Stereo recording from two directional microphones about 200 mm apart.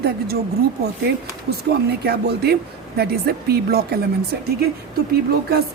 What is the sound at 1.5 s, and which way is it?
A woman's voice, 55° right (ahead or behind).